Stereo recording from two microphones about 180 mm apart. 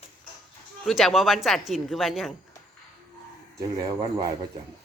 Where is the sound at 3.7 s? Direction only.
20° right (ahead or behind).